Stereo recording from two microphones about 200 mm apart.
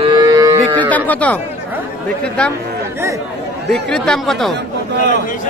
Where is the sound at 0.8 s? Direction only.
10° left (ahead or behind).